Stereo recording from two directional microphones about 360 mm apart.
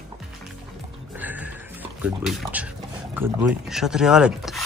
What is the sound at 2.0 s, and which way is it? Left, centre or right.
Speech, centre.